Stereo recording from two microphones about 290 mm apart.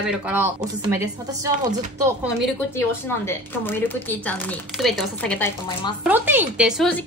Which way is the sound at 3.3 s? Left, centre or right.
Centre.